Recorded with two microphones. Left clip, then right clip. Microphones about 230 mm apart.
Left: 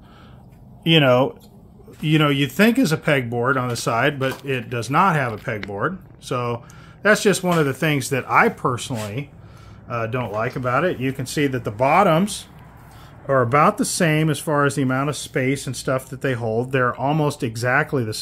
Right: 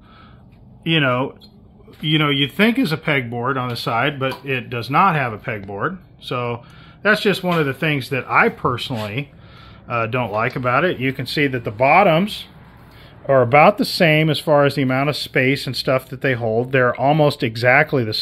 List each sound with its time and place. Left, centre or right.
0.8 s speech: centre